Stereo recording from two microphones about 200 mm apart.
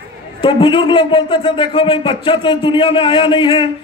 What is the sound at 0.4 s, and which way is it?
A man's voice, 25° left (ahead or behind).